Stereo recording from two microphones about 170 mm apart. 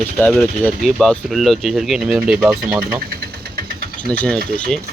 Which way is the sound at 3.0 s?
60° right (ahead or behind).